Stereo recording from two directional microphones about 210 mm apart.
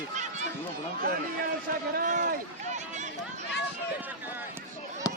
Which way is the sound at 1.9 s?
40° right (ahead or behind).